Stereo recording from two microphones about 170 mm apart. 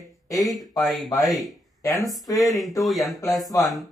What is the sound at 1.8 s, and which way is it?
Speech, 20° left (ahead or behind).